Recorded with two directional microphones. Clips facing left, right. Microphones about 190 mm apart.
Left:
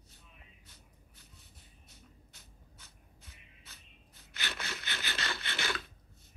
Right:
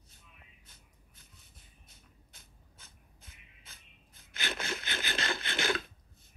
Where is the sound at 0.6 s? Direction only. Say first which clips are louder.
Left 2 dB; 50° right (ahead or behind).